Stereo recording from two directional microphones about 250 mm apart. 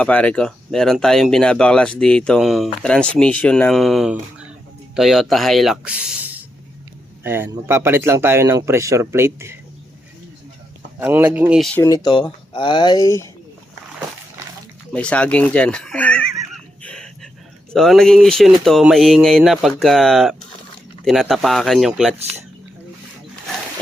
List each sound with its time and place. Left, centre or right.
0.0 s speech: centre
11.0 s speech: centre
11.9 s speech: centre
14.9 s speech: centre
16.5 s a sound: centre
17.7 s speech: centre